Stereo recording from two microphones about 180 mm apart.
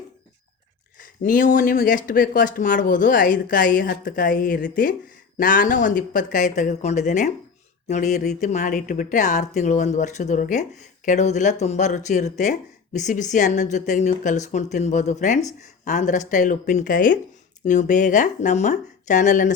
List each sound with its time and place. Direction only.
1.0 s a woman's voice: 50° left (ahead or behind)